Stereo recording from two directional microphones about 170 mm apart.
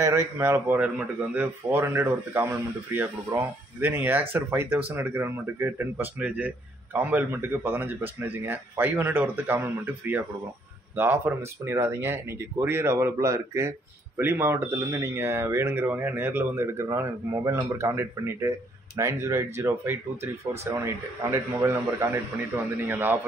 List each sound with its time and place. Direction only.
0.0 s speech: 15° right (ahead or behind)